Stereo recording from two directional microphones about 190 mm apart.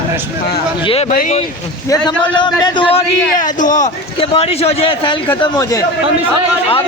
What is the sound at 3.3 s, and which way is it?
Speech, 40° left (ahead or behind).